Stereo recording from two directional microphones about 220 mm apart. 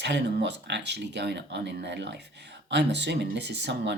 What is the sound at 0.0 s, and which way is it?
Speech, 50° right (ahead or behind).